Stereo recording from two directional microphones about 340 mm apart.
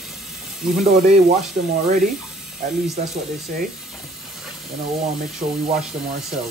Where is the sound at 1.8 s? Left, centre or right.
Centre.